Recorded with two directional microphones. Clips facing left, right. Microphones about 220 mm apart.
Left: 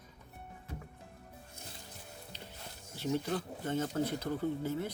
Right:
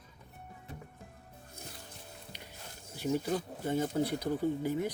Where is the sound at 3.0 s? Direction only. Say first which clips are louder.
Right 2 dB; 10° right (ahead or behind).